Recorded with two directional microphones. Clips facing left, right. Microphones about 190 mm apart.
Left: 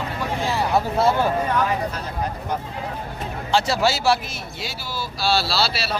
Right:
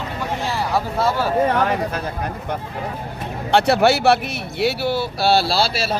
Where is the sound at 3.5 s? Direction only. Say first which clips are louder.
Right 5 dB; 60° right (ahead or behind).